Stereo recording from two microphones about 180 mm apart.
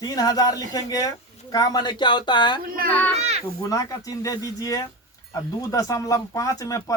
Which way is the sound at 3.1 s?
35° right (ahead or behind).